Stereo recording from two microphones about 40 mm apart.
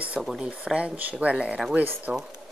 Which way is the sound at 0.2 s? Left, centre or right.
Centre.